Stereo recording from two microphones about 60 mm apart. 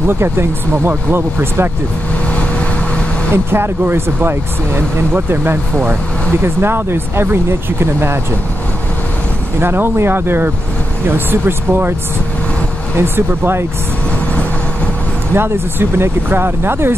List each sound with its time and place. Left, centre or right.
0.2 s speech: right
3.5 s speech: right
9.6 s speech: right
12.9 s speech: right
15.3 s speech: right